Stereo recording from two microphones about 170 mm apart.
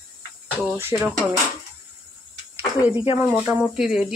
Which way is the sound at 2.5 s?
10° right (ahead or behind).